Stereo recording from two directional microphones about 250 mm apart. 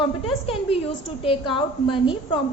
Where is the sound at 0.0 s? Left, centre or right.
Left.